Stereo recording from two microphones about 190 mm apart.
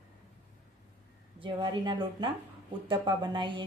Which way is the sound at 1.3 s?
25° right (ahead or behind).